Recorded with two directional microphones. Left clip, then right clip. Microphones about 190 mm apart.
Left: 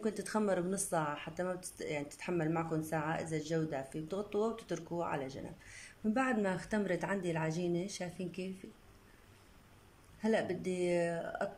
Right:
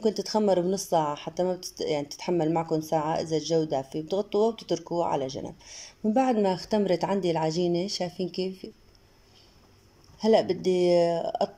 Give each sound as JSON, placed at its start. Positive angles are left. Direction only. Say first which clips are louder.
{"t": 0.0, "sound": "speech", "louder": "right 10 dB", "side_deg": -20}
{"t": 10.2, "sound": "speech", "louder": "right 12 dB", "side_deg": -25}